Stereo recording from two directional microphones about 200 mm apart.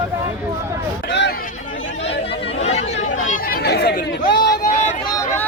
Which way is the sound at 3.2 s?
45° left (ahead or behind).